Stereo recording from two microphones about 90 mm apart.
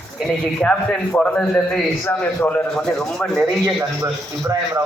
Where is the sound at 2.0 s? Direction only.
25° left (ahead or behind).